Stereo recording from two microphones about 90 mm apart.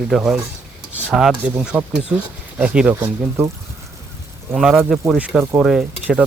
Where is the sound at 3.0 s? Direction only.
30° right (ahead or behind).